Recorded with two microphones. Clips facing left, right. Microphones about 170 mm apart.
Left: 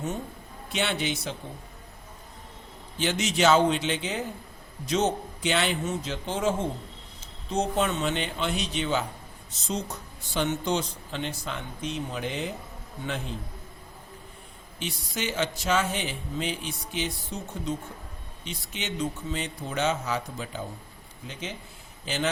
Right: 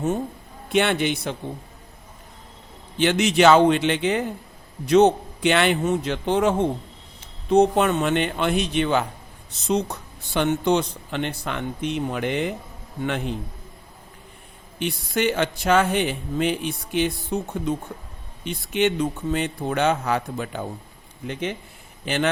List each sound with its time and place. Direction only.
0.7 s speech: 60° right (ahead or behind)
3.0 s speech: 65° right (ahead or behind)
14.8 s speech: 60° right (ahead or behind)
22.0 s a man's voice: 60° right (ahead or behind)